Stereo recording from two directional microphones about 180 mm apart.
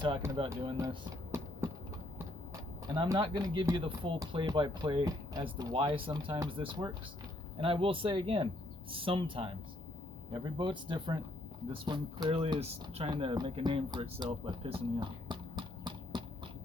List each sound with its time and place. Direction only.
0.5 s speech: 20° right (ahead or behind)
2.9 s speech: 25° right (ahead or behind)